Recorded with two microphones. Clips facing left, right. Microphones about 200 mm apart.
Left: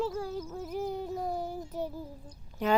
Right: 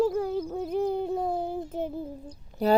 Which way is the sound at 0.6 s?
25° right (ahead or behind).